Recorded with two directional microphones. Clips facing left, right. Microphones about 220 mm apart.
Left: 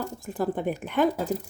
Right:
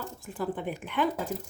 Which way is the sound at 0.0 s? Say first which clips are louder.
Left 5 dB; 40° left (ahead or behind).